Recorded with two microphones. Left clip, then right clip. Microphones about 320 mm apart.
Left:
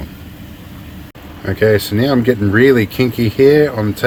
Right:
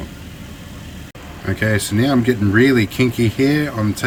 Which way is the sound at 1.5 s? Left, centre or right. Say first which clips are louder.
Left 7 dB; centre.